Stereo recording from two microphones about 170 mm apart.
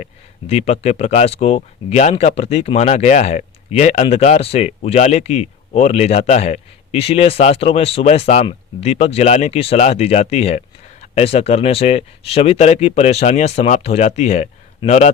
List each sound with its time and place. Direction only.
0.0 s speech: 40° left (ahead or behind)